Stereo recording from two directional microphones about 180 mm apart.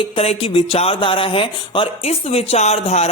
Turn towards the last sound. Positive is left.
turn(degrees=35)  # may be behind; listen again after turning